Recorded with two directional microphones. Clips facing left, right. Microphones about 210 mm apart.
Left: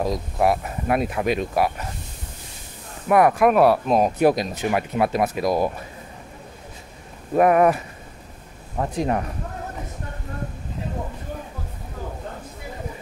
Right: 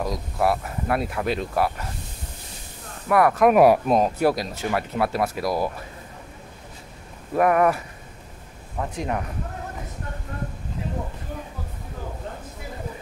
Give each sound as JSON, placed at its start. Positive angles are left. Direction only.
{"t": 0.0, "sound": "speech", "side_deg": 20}
{"t": 3.1, "sound": "speech", "side_deg": 20}
{"t": 3.5, "sound": "speech", "side_deg": -10}
{"t": 4.0, "sound": "speech", "side_deg": 20}
{"t": 7.3, "sound": "speech", "side_deg": 20}
{"t": 8.7, "sound": "speech", "side_deg": 35}